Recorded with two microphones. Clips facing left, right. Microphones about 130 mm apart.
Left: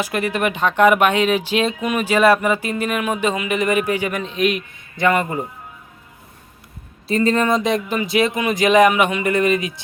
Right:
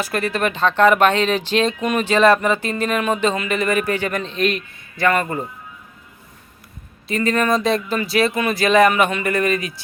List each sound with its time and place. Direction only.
0.0 s speech: 15° left (ahead or behind)
7.1 s speech: 30° left (ahead or behind)